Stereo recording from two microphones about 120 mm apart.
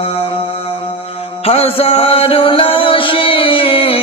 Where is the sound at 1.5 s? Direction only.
55° left (ahead or behind).